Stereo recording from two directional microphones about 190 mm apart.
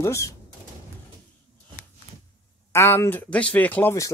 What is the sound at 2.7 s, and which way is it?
Speech, 15° left (ahead or behind).